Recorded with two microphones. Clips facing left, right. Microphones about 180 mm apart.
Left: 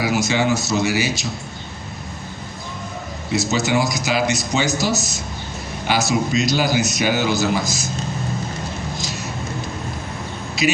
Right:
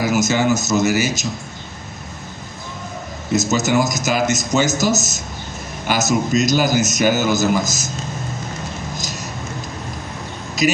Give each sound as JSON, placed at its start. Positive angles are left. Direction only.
{"t": 0.0, "sound": "a man's voice", "side_deg": -45}
{"t": 3.3, "sound": "a man's voice", "side_deg": -45}
{"t": 9.0, "sound": "a sound", "side_deg": -40}
{"t": 10.6, "sound": "speech", "side_deg": -40}